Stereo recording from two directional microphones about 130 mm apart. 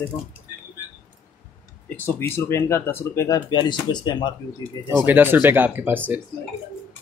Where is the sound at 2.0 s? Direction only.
20° left (ahead or behind).